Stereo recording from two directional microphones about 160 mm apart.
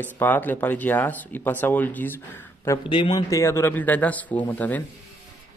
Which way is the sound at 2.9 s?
30° left (ahead or behind).